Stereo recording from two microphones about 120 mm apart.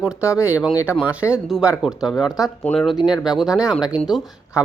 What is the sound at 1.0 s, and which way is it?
Speech, 10° right (ahead or behind).